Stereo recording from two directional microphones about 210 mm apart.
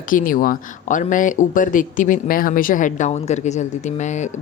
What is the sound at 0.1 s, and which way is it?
Speech, 40° left (ahead or behind).